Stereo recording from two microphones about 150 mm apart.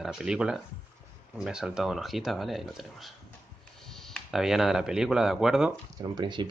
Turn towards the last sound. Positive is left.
turn(degrees=-30)  # may be behind; listen again after turning